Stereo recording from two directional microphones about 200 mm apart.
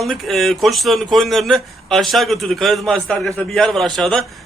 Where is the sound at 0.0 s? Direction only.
Centre (ahead or behind).